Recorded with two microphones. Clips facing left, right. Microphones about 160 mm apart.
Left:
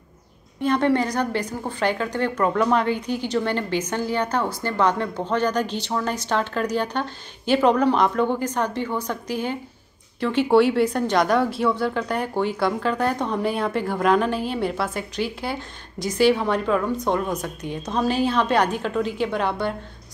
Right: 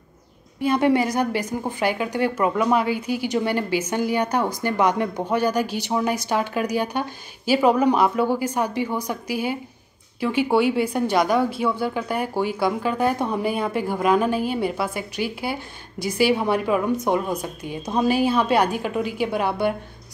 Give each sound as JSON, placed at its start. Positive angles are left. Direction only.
{"t": 0.6, "sound": "a woman's voice", "side_deg": -10}